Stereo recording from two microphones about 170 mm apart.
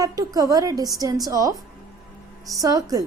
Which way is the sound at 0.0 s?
20° right (ahead or behind).